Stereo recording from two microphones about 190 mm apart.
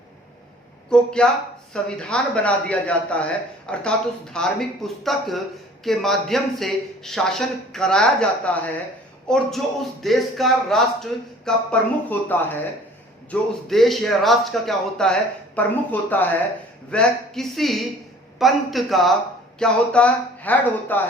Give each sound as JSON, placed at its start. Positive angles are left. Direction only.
{"t": 0.9, "sound": "a man's voice", "side_deg": 5}
{"t": 13.7, "sound": "a man's voice", "side_deg": 0}